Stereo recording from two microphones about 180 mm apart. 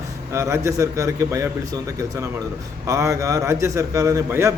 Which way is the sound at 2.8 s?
15° right (ahead or behind).